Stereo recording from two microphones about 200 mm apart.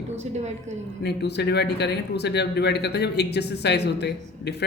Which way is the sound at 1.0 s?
55° left (ahead or behind).